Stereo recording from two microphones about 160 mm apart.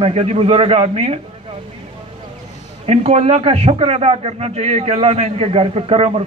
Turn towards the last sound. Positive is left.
turn(degrees=-35)  # may be behind; listen again after turning